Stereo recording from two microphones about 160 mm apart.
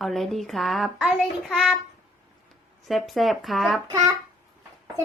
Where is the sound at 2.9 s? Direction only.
Centre (ahead or behind).